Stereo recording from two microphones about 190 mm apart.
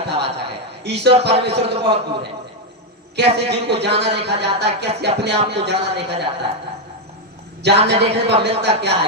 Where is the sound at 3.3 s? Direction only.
60° right (ahead or behind).